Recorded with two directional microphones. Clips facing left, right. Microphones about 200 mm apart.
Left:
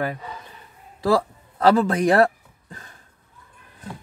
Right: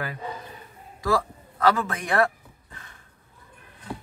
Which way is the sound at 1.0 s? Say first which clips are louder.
Left 5 dB; 35° left (ahead or behind).